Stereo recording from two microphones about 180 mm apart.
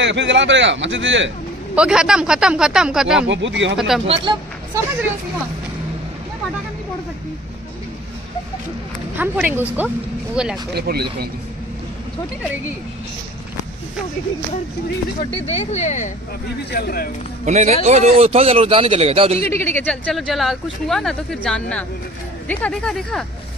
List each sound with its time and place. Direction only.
0.0 s a man's voice: 80° right
1.8 s speech: 5° right (ahead or behind)
3.3 s a man's voice: 90° right
3.7 s speech: 5° right (ahead or behind)
4.0 s speech: 30° right (ahead or behind)
9.1 s speech: 10° right (ahead or behind)
10.7 s speech: 65° right (ahead or behind)
15.5 s speech: 35° left (ahead or behind)
16.7 s speech: 55° left (ahead or behind)
17.5 s speech: 40° right (ahead or behind)
19.5 s speech: 10° left (ahead or behind)